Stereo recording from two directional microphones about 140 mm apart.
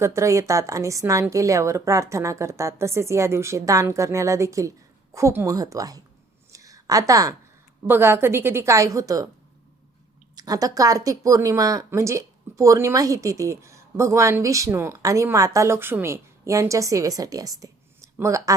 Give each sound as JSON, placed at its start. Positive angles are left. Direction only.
{"t": 0.0, "sound": "speech", "side_deg": -20}
{"t": 6.5, "sound": "a sound", "side_deg": -25}
{"t": 7.9, "sound": "a woman's voice", "side_deg": -15}
{"t": 10.3, "sound": "speech", "side_deg": -25}